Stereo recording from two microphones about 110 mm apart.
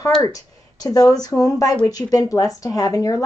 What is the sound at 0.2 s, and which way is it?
Speech, 35° left (ahead or behind).